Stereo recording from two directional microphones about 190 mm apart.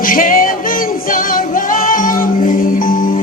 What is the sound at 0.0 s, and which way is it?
Music, 45° left (ahead or behind).